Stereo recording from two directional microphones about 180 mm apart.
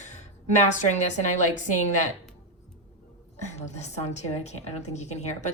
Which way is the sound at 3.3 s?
40° left (ahead or behind).